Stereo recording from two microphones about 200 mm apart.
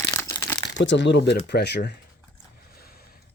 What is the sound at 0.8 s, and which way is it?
Speech, 65° left (ahead or behind).